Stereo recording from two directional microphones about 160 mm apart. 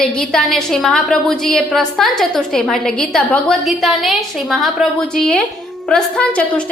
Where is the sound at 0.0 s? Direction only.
5° left (ahead or behind).